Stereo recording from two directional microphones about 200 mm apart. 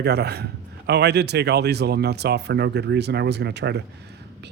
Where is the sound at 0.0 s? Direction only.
55° right (ahead or behind).